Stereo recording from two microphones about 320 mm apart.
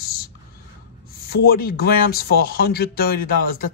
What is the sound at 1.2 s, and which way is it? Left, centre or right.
Speech, left.